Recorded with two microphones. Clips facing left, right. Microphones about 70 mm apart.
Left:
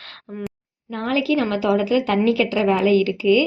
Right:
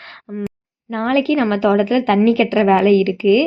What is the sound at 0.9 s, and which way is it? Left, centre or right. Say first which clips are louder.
A woman's voice: right 4 dB; right.